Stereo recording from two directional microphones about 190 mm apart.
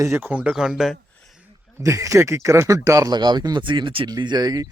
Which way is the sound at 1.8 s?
15° right (ahead or behind).